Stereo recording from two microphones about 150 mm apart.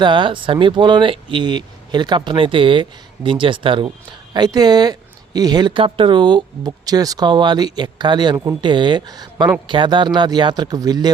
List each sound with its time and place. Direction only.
0.0 s speech: 30° right (ahead or behind)